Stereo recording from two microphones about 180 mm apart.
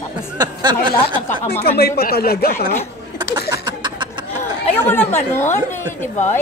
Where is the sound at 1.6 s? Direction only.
60° left (ahead or behind).